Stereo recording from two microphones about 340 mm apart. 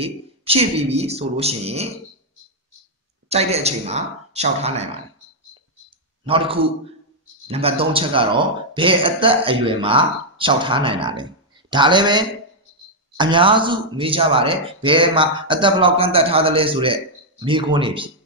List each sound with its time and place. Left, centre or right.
0.0 s speech: centre
3.3 s speech: centre
6.2 s speech: centre